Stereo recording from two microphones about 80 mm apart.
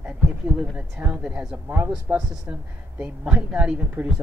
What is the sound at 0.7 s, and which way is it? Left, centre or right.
Speech, centre.